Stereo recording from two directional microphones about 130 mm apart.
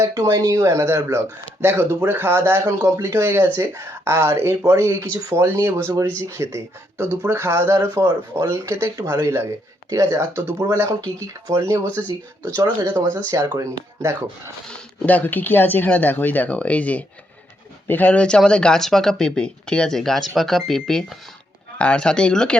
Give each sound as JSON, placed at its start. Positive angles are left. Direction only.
{"t": 0.0, "sound": "speech", "side_deg": -25}
{"t": 14.7, "sound": "speech", "side_deg": 10}